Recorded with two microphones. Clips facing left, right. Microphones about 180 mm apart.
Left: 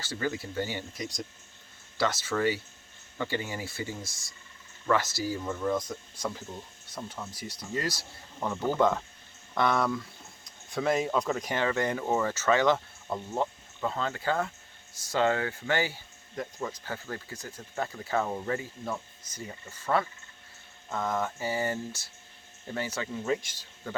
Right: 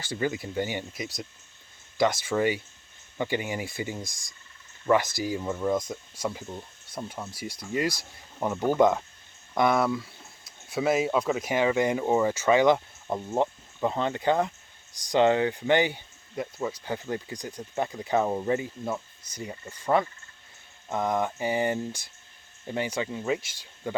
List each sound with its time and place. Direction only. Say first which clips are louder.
0.0 s speech: right 3 dB; 15° right (ahead or behind)